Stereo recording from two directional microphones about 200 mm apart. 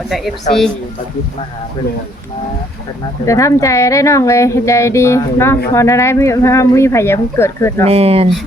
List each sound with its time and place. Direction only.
3.2 s speech: 15° left (ahead or behind)
7.9 s speech: 30° right (ahead or behind)